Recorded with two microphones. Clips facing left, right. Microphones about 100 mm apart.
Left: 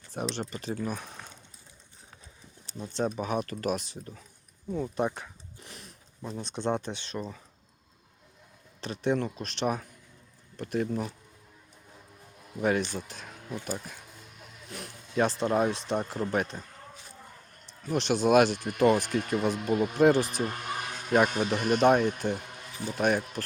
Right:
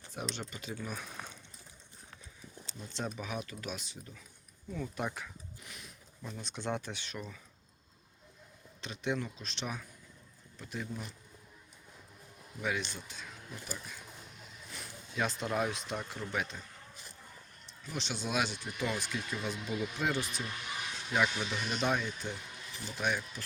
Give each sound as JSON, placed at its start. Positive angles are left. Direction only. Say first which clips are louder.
{"t": 0.3, "sound": "speech", "louder": "left 8 dB", "side_deg": 40}
{"t": 1.2, "sound": "a sound", "louder": "right 1 dB", "side_deg": -5}
{"t": 3.2, "sound": "speech", "louder": "left 9 dB", "side_deg": 45}
{"t": 4.7, "sound": "speech", "louder": "left 8 dB", "side_deg": 30}
{"t": 8.8, "sound": "speech", "louder": "left 8 dB", "side_deg": 50}
{"t": 12.5, "sound": "speech", "louder": "left 9 dB", "side_deg": 55}
{"t": 15.2, "sound": "speech", "louder": "left 8 dB", "side_deg": 35}
{"t": 17.8, "sound": "speech", "louder": "left 13 dB", "side_deg": 55}